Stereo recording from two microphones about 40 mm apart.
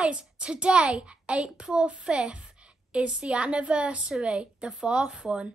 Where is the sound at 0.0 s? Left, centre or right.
Right.